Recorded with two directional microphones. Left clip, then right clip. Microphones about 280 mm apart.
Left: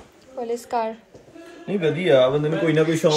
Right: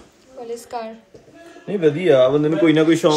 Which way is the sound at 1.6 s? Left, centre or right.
Right.